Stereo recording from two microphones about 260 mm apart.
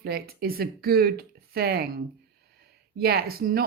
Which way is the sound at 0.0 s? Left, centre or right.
Right.